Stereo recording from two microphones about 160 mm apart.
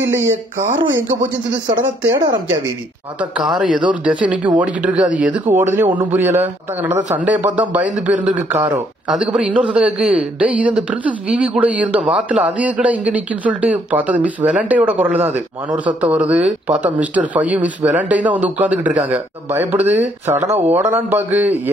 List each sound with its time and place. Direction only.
0.0 s speech: 15° right (ahead or behind)
1.7 s speech: 25° right (ahead or behind)
3.2 s speech: 5° right (ahead or behind)